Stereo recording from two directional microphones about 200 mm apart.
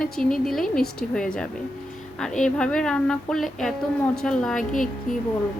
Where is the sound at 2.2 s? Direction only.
Centre (ahead or behind).